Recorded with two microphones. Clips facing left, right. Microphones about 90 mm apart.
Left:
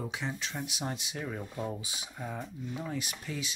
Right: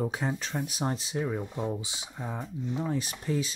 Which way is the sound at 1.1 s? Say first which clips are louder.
Right 6 dB; 20° right (ahead or behind).